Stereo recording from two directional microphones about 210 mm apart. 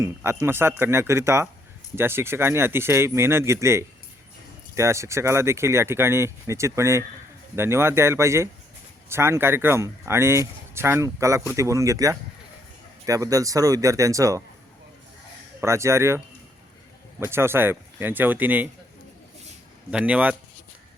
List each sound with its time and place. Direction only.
0.0 s speech: 10° right (ahead or behind)
15.6 s speech: 15° right (ahead or behind)
19.9 s speech: 5° right (ahead or behind)